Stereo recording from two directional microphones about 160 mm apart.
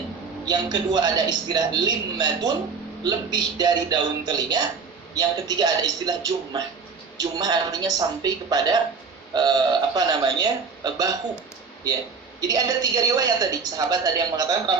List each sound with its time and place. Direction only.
0.4 s a man's voice: 25° right (ahead or behind)
12.4 s a man's voice: 25° right (ahead or behind)